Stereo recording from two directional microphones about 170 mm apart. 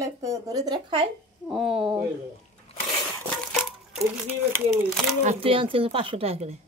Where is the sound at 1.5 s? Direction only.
Centre (ahead or behind).